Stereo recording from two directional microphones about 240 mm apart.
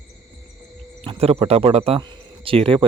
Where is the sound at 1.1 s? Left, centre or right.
Right.